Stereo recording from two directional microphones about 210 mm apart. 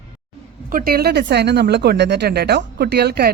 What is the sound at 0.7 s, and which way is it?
Speech, 45° right (ahead or behind).